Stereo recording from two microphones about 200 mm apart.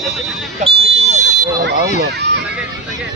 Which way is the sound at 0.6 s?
30° right (ahead or behind).